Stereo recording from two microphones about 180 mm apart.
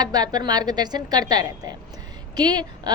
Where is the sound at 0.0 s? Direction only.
20° right (ahead or behind).